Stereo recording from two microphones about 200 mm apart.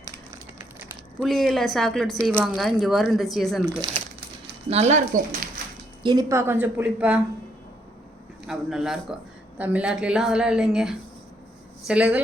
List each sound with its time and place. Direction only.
0.8 s a woman's voice: centre (ahead or behind)
4.7 s speech: 35° right (ahead or behind)
6.0 s a woman's voice: 20° right (ahead or behind)
8.4 s a woman's voice: 5° right (ahead or behind)